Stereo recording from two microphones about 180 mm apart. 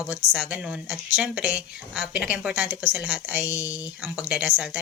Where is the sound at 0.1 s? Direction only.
5° right (ahead or behind).